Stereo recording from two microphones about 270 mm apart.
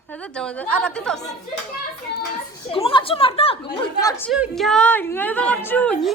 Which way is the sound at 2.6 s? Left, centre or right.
Centre.